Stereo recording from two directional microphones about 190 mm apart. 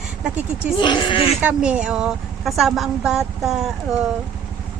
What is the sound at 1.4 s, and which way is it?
A woman's voice, 5° right (ahead or behind).